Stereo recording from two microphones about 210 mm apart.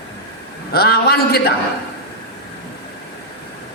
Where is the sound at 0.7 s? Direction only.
45° left (ahead or behind).